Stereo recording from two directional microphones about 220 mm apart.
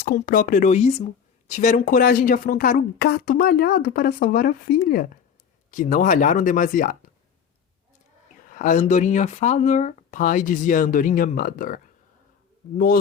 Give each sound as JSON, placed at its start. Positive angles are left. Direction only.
{"t": 0.0, "sound": "speech", "side_deg": 40}
{"t": 8.4, "sound": "speech", "side_deg": 35}